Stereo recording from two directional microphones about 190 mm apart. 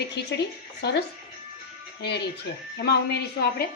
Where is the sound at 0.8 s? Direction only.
60° left (ahead or behind).